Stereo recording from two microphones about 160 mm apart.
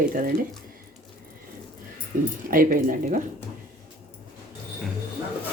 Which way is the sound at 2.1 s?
65° right (ahead or behind).